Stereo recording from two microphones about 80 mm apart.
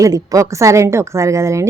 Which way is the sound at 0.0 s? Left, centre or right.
Right.